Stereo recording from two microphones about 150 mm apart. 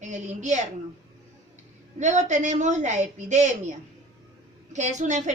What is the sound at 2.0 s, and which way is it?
A woman's voice, 55° right (ahead or behind).